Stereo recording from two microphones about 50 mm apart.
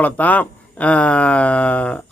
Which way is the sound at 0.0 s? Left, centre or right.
Left.